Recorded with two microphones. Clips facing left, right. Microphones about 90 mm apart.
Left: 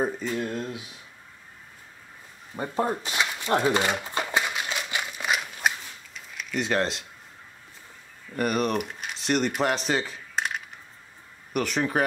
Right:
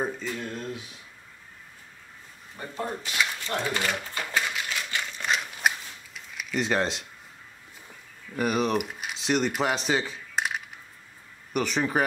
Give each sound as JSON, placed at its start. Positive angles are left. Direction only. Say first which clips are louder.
{"t": 0.4, "sound": "speech", "louder": "left 4 dB", "side_deg": 5}
{"t": 2.5, "sound": "speech", "louder": "left 7 dB", "side_deg": 35}
{"t": 3.0, "sound": "speech", "louder": "left 1 dB", "side_deg": 20}
{"t": 3.6, "sound": "a sound", "louder": "left 5 dB", "side_deg": 25}
{"t": 8.4, "sound": "speech", "louder": "even", "side_deg": 0}